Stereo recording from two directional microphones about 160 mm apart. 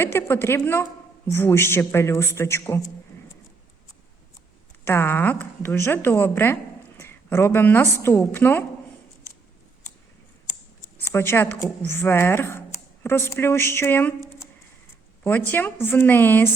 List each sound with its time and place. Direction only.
0.0 s a woman's voice: 15° left (ahead or behind)
4.9 s a woman's voice: 15° left (ahead or behind)
11.1 s a woman's voice: 15° left (ahead or behind)